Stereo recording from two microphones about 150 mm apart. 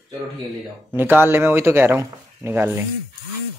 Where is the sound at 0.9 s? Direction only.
15° right (ahead or behind).